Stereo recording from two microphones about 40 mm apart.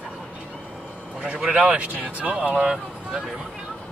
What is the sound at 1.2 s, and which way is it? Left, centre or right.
A man's voice, right.